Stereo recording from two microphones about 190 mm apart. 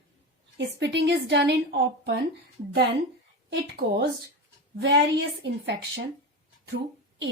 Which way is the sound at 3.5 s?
60° right (ahead or behind).